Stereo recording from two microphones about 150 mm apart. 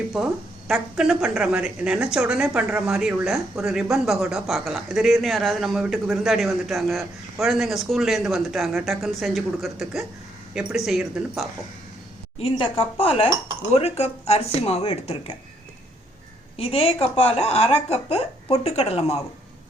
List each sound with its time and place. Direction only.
0.1 s a woman's voice: centre (ahead or behind)
12.4 s speech: 40° left (ahead or behind)
16.6 s speech: 40° left (ahead or behind)